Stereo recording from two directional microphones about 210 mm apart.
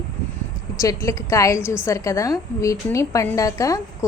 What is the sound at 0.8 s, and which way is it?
A woman's voice, 15° left (ahead or behind).